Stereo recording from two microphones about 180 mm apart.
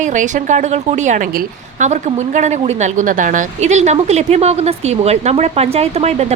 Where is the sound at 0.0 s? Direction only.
45° right (ahead or behind).